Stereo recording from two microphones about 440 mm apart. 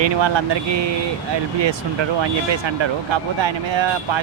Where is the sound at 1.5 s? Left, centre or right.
Right.